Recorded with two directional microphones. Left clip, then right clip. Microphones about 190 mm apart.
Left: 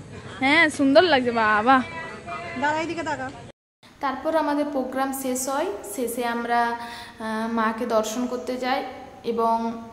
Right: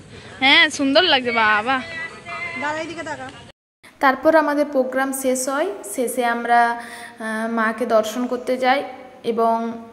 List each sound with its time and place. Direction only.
0.4 s speech: 5° left (ahead or behind)
2.7 s a woman's voice: 40° left (ahead or behind)
4.0 s a woman's voice: 35° right (ahead or behind); by 9.7 s 20° right (ahead or behind)